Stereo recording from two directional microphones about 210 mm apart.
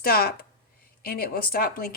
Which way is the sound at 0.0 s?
45° left (ahead or behind).